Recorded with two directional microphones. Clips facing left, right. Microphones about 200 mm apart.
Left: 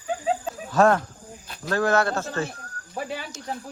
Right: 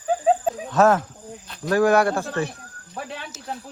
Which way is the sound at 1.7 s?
15° right (ahead or behind).